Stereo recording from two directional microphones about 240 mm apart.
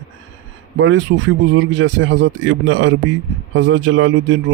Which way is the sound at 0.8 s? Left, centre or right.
Right.